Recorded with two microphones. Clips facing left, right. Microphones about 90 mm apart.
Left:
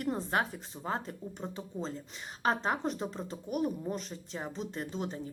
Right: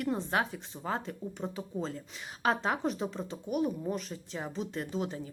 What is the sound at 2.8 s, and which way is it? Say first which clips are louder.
Speech: right 2 dB; centre (ahead or behind).